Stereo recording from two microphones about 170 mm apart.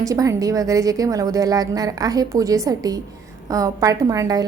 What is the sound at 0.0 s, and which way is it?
A woman's voice, 20° right (ahead or behind).